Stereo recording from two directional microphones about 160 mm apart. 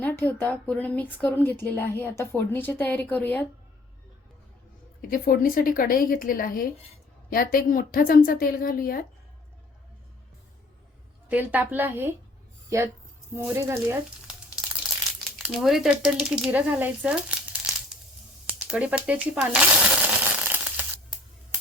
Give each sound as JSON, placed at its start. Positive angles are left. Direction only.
{"t": 0.0, "sound": "speech", "side_deg": 10}
{"t": 5.1, "sound": "a woman's voice", "side_deg": 65}
{"t": 11.3, "sound": "speech", "side_deg": -10}
{"t": 13.3, "sound": "speech", "side_deg": -20}
{"t": 14.3, "sound": "crumpling", "side_deg": -5}
{"t": 15.4, "sound": "speech", "side_deg": 0}
{"t": 18.4, "sound": "a sound", "side_deg": -5}